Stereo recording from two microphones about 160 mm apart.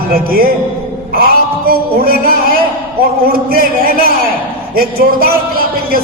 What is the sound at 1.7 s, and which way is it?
A man's voice, 65° right (ahead or behind).